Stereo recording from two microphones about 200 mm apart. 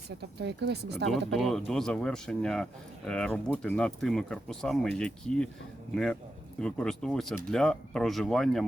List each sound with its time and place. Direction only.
0.2 s speech: 55° right (ahead or behind)
1.3 s speech: centre (ahead or behind)